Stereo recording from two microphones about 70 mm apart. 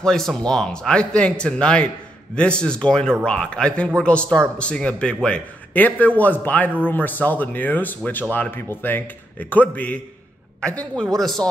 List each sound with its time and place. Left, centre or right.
0.0 s a man's voice: centre
11.1 s speech: centre